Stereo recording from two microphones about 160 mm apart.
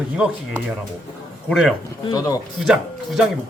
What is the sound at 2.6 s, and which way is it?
Speech, centre (ahead or behind).